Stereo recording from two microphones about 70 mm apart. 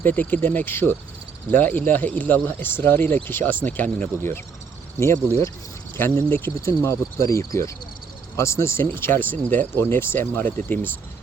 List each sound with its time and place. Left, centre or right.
0.0 s speech: left
4.9 s speech: left
6.8 s speech: left